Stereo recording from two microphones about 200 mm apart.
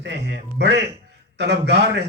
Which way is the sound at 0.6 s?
60° right (ahead or behind).